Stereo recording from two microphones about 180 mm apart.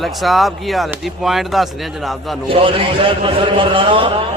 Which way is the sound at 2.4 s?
30° right (ahead or behind).